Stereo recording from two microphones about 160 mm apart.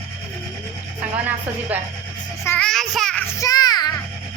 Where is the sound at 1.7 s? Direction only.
10° right (ahead or behind).